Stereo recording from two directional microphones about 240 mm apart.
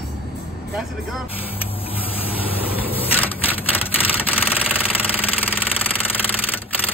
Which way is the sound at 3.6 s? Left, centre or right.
Centre.